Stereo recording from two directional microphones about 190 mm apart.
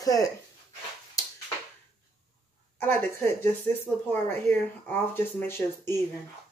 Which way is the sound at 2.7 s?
10° left (ahead or behind).